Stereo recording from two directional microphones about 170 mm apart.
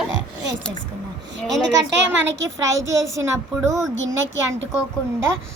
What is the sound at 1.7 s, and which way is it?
Speech, 90° right.